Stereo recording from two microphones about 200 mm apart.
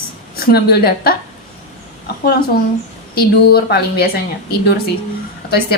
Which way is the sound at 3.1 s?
50° left (ahead or behind).